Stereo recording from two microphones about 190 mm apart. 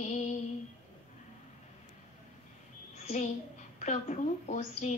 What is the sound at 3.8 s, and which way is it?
Female singing, 35° left (ahead or behind).